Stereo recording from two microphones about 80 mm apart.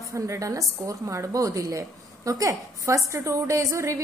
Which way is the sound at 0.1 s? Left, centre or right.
Right.